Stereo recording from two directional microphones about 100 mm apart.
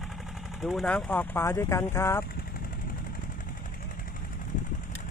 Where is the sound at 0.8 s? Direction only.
15° left (ahead or behind).